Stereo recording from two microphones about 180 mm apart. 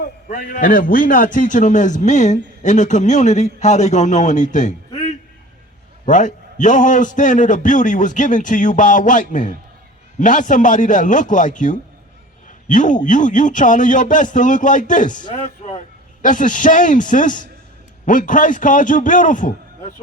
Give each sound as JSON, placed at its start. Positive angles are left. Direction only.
{"t": 0.0, "sound": "a man's voice", "side_deg": 50}
{"t": 6.1, "sound": "a man's voice", "side_deg": 45}